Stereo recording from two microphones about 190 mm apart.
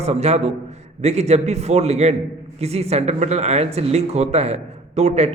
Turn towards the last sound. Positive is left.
turn(degrees=-35)  # may be behind; listen again after turning